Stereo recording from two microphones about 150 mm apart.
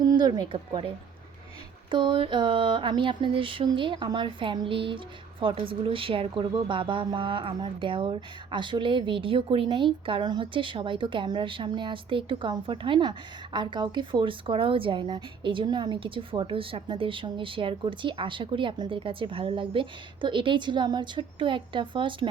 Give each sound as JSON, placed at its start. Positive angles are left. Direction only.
{"t": 0.1, "sound": "speech", "side_deg": -30}
{"t": 1.9, "sound": "a woman's voice", "side_deg": -35}